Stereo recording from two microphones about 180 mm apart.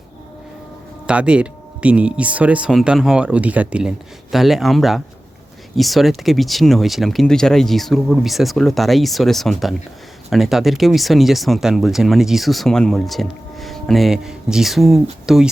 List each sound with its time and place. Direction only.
1.0 s speech: 5° right (ahead or behind)